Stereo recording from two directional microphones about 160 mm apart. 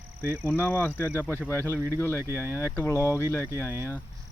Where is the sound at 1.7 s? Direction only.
15° right (ahead or behind).